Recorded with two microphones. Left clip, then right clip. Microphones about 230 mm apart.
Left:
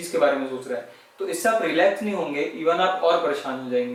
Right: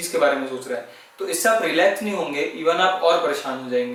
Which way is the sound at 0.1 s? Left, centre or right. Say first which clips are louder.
Right 1 dB; centre.